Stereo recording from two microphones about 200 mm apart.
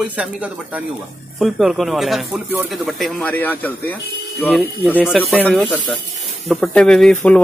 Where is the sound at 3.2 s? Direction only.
10° left (ahead or behind).